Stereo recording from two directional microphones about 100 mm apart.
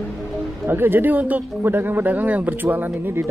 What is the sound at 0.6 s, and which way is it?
Speech, 20° right (ahead or behind).